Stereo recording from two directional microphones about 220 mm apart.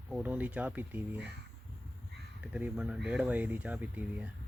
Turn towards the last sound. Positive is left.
turn(degrees=-5)  # may be behind; listen again after turning